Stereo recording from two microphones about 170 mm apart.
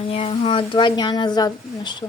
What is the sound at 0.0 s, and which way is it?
Speech, 35° left (ahead or behind).